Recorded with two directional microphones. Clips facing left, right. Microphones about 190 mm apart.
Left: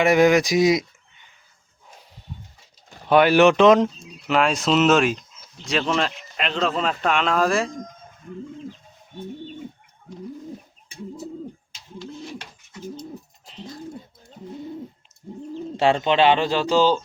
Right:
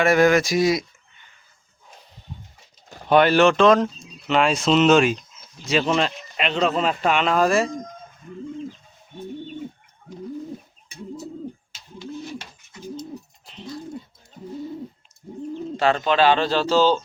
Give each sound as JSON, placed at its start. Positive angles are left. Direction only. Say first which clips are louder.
{"t": 0.0, "sound": "speech", "louder": "left 1 dB", "side_deg": 15}
{"t": 3.1, "sound": "speech", "louder": "left 1 dB", "side_deg": 10}
{"t": 4.3, "sound": "a man's voice", "louder": "right 1 dB", "side_deg": 0}
{"t": 15.8, "sound": "speech", "louder": "left 1 dB", "side_deg": 25}